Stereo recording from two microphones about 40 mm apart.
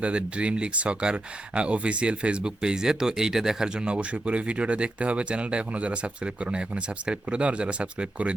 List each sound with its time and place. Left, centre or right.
0.0 s speech: right
2.6 s speech: centre
3.9 s speech: right